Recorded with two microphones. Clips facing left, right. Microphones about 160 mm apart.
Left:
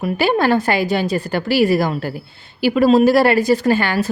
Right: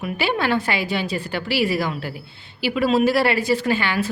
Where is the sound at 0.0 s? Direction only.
45° left (ahead or behind).